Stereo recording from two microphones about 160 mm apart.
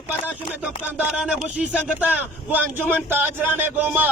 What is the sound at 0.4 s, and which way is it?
A man's voice, 5° right (ahead or behind).